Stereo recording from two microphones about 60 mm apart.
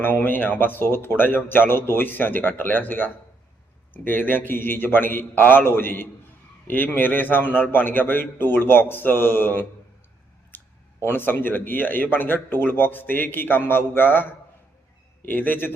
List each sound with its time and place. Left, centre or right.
0.0 s speech: left
11.0 s speech: left
15.3 s speech: left